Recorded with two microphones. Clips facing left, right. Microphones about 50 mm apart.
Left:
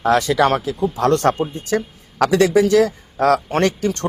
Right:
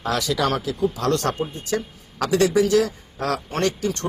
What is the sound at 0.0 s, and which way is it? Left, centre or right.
Speech, left.